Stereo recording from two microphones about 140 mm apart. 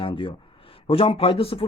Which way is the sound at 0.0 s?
40° left (ahead or behind).